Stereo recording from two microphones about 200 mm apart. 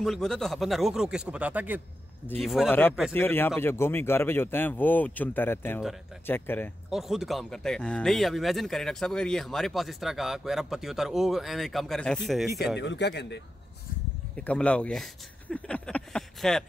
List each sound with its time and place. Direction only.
0.0 s speech: centre (ahead or behind)
2.2 s speech: 5° left (ahead or behind)
3.1 s a man's voice: 10° left (ahead or behind)
6.9 s speech: centre (ahead or behind)
12.7 s speech: 60° left (ahead or behind)
14.3 s speech: 5° left (ahead or behind)